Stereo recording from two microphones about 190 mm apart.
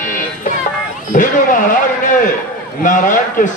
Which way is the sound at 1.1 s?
45° left (ahead or behind).